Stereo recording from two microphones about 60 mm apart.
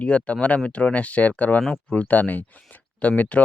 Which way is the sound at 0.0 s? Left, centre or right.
Left.